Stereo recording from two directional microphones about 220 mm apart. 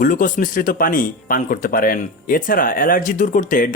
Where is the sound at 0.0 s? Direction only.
35° left (ahead or behind).